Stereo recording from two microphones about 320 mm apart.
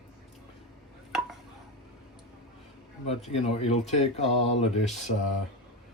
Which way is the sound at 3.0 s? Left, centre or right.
Centre.